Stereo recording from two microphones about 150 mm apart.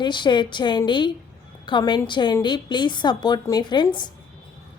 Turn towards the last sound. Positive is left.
turn(degrees=30)  # may be behind; listen again after turning